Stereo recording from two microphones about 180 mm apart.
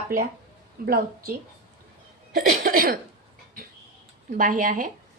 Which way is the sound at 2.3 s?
50° right (ahead or behind).